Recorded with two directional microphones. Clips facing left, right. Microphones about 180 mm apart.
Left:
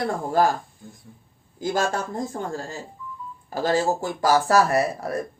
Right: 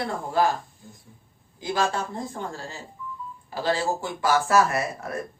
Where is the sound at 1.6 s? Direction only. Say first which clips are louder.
Left 2 dB; 45° left (ahead or behind).